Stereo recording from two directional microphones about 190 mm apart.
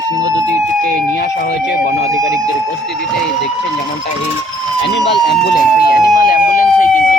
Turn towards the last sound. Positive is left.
turn(degrees=45)  # may be behind; listen again after turning